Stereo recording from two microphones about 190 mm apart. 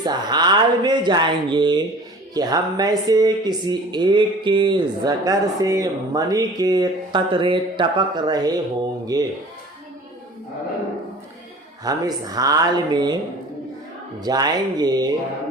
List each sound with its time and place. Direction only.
0.0 s speech: 20° right (ahead or behind)
11.8 s speech: 20° right (ahead or behind)
14.3 s speech: 20° right (ahead or behind)